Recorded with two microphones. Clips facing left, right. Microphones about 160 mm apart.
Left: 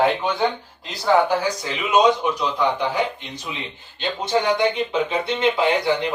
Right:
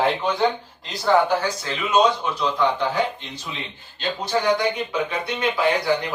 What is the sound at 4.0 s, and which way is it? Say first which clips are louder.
Speech: left 2 dB; 25° left (ahead or behind).